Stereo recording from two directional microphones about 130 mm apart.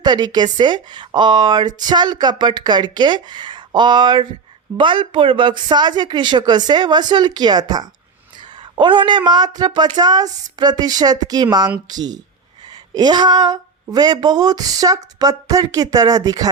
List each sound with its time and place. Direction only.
0.0 s speech: 30° right (ahead or behind)